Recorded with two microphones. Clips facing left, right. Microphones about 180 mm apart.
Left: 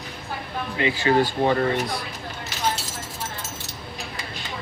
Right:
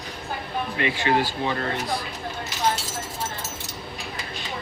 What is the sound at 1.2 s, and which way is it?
Speech, 50° left (ahead or behind).